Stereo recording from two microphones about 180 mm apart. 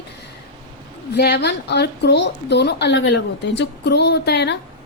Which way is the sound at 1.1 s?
65° left (ahead or behind).